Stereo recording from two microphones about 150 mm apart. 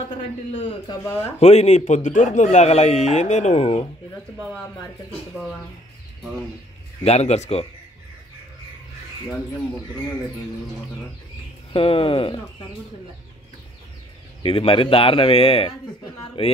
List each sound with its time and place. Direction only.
0.5 s a man's voice: 40° left (ahead or behind)
7.0 s a man's voice: 45° left (ahead or behind)
11.7 s speech: 40° left (ahead or behind)
14.4 s speech: 40° left (ahead or behind)